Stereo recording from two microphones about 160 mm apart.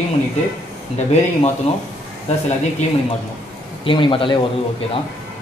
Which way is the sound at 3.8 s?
30° left (ahead or behind).